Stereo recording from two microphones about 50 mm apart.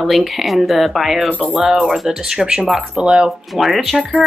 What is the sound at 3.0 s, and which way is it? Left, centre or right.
Speech, right.